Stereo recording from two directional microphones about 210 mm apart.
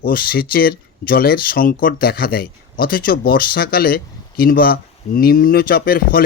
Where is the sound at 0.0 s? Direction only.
45° left (ahead or behind).